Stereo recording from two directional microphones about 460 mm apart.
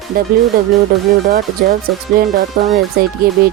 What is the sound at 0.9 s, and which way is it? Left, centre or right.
Speech, centre.